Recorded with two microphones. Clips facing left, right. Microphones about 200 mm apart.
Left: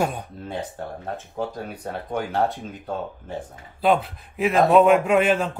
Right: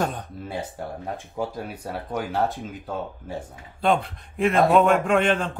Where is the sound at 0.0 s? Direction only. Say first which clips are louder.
Left 2 dB; 10° left (ahead or behind).